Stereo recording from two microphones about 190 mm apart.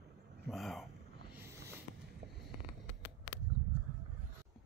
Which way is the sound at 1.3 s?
15° right (ahead or behind).